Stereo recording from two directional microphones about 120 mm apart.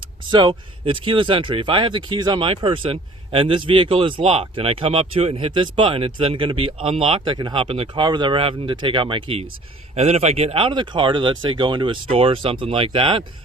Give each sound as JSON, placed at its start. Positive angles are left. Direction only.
{"t": 0.3, "sound": "speech", "side_deg": -40}
{"t": 9.9, "sound": "speech", "side_deg": -60}